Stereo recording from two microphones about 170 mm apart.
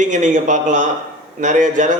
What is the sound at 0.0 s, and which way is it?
Speech, 45° right (ahead or behind).